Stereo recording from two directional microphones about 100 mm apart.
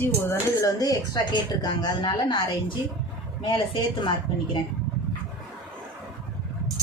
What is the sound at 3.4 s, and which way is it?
Speech, 50° left (ahead or behind).